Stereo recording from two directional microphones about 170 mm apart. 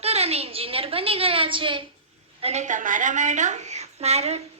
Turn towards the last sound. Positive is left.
turn(degrees=-40)  # may be behind; listen again after turning